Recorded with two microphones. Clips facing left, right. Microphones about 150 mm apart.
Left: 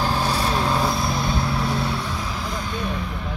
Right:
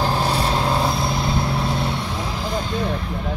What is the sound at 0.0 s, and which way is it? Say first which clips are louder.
Vehicle: right 2 dB; 25° right (ahead or behind).